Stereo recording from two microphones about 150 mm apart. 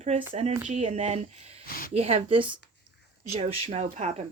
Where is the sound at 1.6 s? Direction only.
75° left (ahead or behind).